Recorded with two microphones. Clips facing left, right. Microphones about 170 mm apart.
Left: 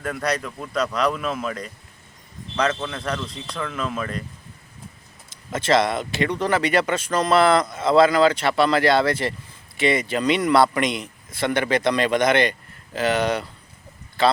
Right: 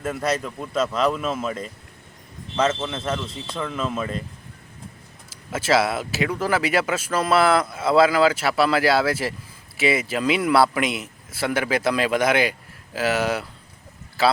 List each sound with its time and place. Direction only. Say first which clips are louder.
0.4 s speech: right 1 dB; 5° right (ahead or behind)
1.5 s speech: right 1 dB; 25° right (ahead or behind)
3.2 s speech: right 1 dB; 10° right (ahead or behind)
5.3 s speech: left 1 dB; 5° right (ahead or behind)